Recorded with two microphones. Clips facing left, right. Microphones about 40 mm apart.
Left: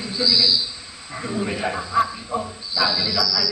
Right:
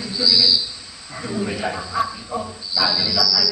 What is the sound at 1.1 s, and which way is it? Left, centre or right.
Speech, left.